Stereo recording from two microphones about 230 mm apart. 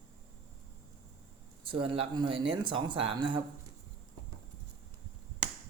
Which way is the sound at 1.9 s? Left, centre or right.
Right.